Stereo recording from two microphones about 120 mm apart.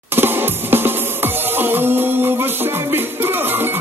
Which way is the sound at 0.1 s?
20° right (ahead or behind).